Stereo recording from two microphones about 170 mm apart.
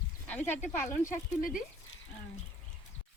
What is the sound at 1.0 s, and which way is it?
Speech, 55° left (ahead or behind).